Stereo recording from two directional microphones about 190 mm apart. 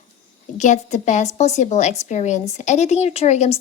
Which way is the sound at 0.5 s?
40° left (ahead or behind).